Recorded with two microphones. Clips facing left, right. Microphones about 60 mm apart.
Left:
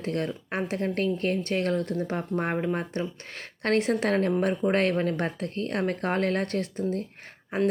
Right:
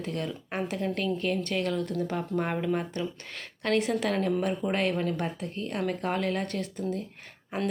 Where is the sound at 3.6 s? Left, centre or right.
Left.